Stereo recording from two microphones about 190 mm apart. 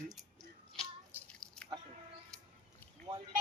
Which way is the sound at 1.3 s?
5° left (ahead or behind).